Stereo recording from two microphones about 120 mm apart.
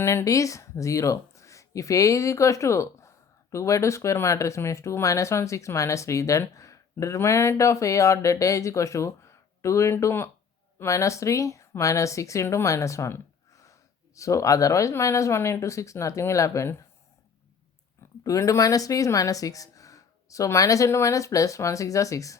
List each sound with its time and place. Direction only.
0.0 s speech: 25° left (ahead or behind)
18.2 s speech: 30° left (ahead or behind)